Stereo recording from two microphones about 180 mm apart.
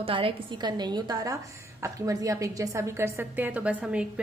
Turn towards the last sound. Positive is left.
turn(degrees=-5)  # may be behind; listen again after turning